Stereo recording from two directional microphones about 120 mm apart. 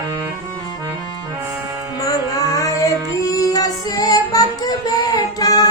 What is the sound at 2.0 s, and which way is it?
Music, 30° left (ahead or behind).